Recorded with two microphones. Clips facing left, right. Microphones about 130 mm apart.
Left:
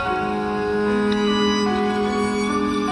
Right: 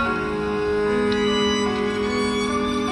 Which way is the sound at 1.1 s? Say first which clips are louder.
Left 1 dB; 30° left (ahead or behind).